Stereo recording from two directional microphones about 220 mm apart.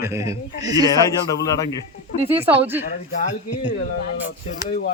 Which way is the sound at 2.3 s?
10° right (ahead or behind).